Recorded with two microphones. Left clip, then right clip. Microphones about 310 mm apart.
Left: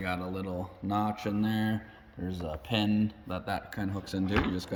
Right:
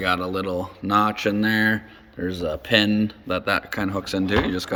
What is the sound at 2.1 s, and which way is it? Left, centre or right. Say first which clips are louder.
Speech: right 12 dB; centre.